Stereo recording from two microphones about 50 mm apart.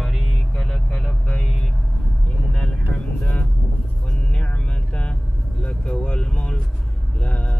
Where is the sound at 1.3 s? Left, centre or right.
Centre.